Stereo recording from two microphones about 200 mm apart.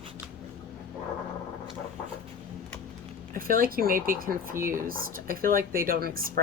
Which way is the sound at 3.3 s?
45° right (ahead or behind).